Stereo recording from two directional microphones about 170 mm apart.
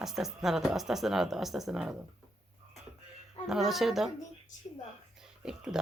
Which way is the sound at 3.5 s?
Centre (ahead or behind).